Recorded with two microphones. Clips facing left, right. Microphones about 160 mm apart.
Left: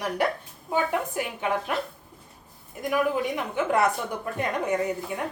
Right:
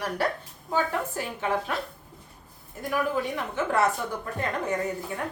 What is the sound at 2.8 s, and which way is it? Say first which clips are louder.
A woman's voice: left 2 dB; 15° left (ahead or behind).